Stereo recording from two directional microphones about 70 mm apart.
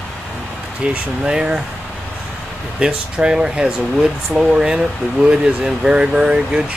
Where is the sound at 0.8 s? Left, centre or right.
Centre.